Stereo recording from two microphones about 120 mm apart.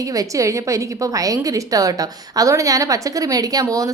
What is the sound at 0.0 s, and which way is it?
A woman's voice, 30° right (ahead or behind).